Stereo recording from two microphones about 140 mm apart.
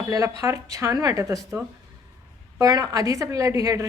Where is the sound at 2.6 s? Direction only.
25° right (ahead or behind).